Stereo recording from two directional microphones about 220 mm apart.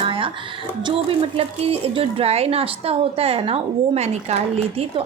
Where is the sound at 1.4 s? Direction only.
25° right (ahead or behind).